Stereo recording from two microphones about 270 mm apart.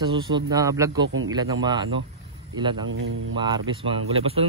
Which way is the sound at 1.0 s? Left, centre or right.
Right.